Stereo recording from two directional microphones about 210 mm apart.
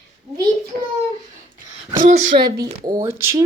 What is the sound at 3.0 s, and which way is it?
Speech, 10° right (ahead or behind).